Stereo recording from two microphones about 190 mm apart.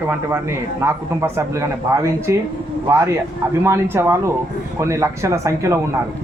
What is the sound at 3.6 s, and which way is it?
Speech, 15° right (ahead or behind).